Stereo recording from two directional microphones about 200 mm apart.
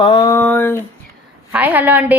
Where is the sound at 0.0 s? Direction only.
20° left (ahead or behind).